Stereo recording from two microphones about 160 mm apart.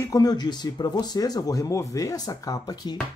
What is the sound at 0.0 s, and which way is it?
Speech, 20° left (ahead or behind).